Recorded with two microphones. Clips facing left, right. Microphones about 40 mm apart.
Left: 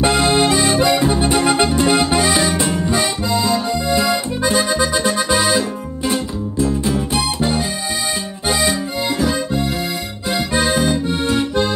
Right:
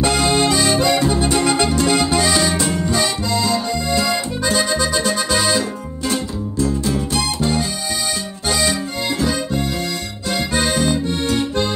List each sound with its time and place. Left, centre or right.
0.0 s accordion: left
1.8 s music: left
8.5 s accordion: centre